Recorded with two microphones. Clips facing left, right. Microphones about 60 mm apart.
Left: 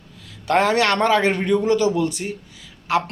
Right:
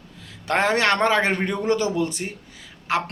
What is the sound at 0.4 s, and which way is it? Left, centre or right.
A man's voice, right.